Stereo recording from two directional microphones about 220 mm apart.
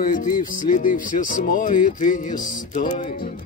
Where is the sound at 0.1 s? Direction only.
35° left (ahead or behind).